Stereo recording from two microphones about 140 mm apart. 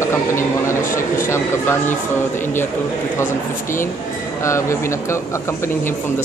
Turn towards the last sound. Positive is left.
turn(degrees=20)  # may be behind; listen again after turning